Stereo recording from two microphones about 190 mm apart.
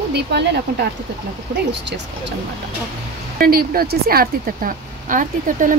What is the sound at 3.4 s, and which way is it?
Speech, 50° right (ahead or behind).